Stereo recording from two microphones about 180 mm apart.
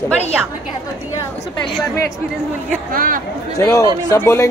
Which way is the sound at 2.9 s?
50° right (ahead or behind).